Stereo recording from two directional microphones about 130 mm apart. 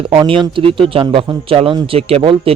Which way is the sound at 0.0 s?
45° right (ahead or behind).